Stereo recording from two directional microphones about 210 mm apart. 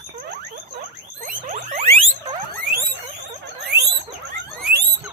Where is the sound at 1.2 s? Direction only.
35° right (ahead or behind).